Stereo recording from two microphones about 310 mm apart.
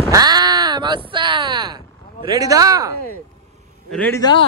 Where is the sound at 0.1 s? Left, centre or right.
Centre.